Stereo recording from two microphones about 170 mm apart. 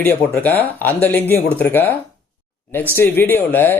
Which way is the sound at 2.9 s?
10° left (ahead or behind).